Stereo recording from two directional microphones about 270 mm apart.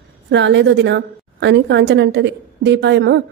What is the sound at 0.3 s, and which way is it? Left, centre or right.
A woman's voice, right.